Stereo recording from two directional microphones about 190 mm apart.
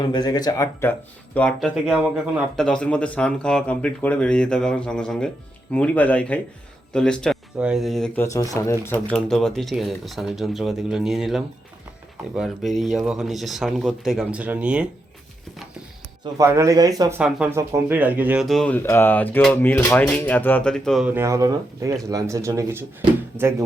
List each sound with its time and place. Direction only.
0.0 s speech: 20° left (ahead or behind); by 8.2 s centre (ahead or behind)
8.2 s speech: 15° left (ahead or behind); by 14.8 s 5° right (ahead or behind)
16.2 s speech: 15° right (ahead or behind)
17.2 s speech: 5° right (ahead or behind)
21.1 s speech: 15° right (ahead or behind)